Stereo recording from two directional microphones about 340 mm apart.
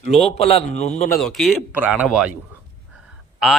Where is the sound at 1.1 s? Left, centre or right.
Centre.